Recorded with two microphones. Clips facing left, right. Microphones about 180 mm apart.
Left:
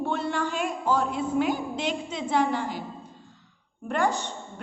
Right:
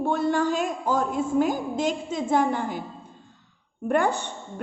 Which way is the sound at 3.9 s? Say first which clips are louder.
Right 3 dB; 55° right (ahead or behind).